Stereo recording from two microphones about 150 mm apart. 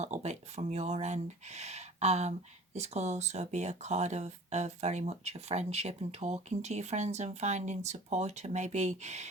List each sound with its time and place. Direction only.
0.0 s speech: 50° right (ahead or behind)